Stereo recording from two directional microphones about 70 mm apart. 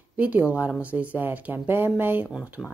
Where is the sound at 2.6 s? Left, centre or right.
Centre.